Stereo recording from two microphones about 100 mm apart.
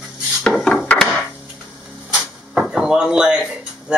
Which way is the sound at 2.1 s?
5° right (ahead or behind).